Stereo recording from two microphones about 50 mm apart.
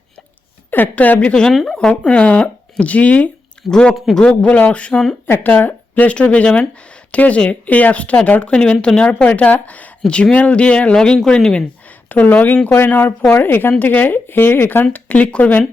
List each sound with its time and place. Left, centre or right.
0.7 s speech: left
1.3 s speech: centre
1.9 s speech: left
3.9 s a man's voice: centre
4.2 s speech: centre
4.4 s speech: left
5.2 s speech: left
6.1 s speech: left
12.0 s speech: left
15.1 s speech: left